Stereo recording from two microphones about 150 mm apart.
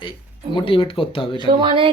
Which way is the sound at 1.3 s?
35° right (ahead or behind).